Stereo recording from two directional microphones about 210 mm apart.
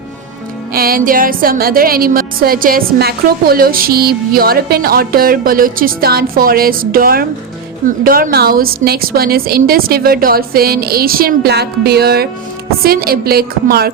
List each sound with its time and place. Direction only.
0.7 s a woman's voice: 45° right (ahead or behind)